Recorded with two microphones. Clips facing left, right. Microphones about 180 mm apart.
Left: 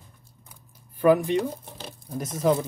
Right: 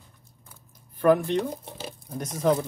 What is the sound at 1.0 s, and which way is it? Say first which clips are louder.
Speech: left 1 dB; 5° left (ahead or behind).